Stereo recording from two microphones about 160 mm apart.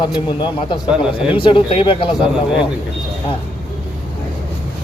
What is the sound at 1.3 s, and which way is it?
Speech, 30° left (ahead or behind).